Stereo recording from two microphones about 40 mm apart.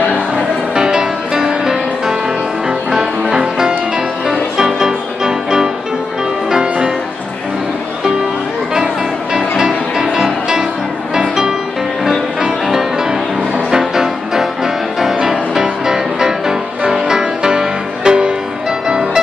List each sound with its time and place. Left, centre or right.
0.7 s music: centre
8.7 s music: centre
13.7 s music: centre